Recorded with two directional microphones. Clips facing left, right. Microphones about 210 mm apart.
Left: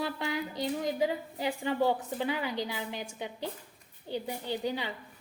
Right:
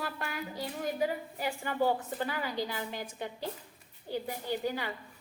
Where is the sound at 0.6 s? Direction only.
20° left (ahead or behind).